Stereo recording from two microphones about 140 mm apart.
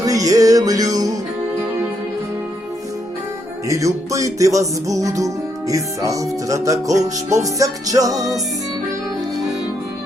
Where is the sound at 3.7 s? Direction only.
25° right (ahead or behind).